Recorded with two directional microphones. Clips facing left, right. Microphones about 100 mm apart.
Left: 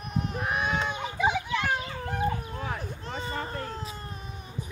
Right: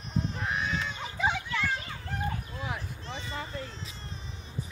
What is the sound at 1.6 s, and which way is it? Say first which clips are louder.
Children playing: left 3 dB; 60° left (ahead or behind).